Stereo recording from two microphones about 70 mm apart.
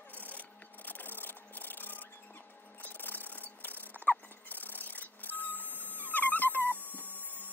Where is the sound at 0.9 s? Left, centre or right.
Left.